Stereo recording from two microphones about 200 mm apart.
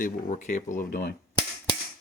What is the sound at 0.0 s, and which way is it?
Speech, 40° left (ahead or behind).